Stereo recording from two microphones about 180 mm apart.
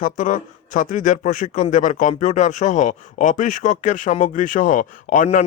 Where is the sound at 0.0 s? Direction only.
45° left (ahead or behind).